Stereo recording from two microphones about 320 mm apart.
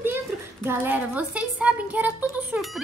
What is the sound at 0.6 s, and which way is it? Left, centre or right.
A woman's voice, centre.